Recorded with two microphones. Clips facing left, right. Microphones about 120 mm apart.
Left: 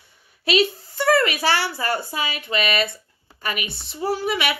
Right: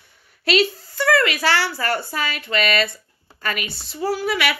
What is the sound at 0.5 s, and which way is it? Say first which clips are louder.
A woman's voice: right 1 dB; 20° left (ahead or behind).